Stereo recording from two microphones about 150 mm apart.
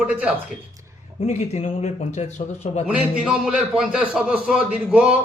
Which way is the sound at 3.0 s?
5° right (ahead or behind).